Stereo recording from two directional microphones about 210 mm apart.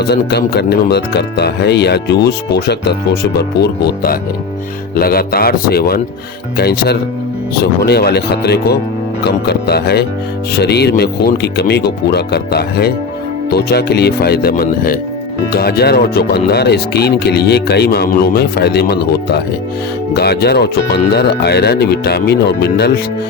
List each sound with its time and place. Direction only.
0.0 s speech: 50° left (ahead or behind)